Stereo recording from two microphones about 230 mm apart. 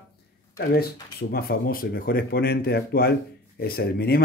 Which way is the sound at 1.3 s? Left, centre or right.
Left.